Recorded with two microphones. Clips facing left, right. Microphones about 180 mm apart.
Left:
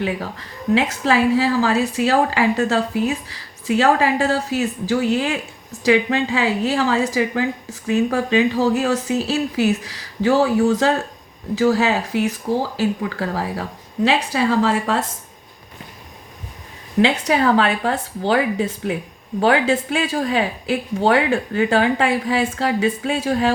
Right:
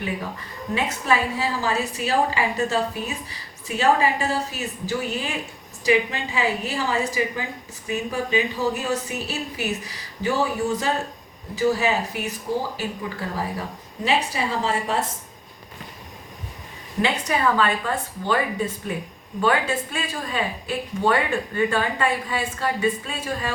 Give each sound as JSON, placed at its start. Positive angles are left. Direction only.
{"t": 0.0, "sound": "a woman's voice", "side_deg": 90}
{"t": 17.0, "sound": "a woman's voice", "side_deg": 75}